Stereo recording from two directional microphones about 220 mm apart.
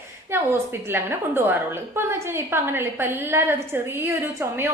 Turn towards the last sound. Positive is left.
turn(degrees=-10)  # may be behind; listen again after turning